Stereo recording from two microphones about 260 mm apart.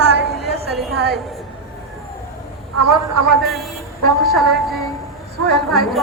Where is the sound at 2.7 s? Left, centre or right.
Right.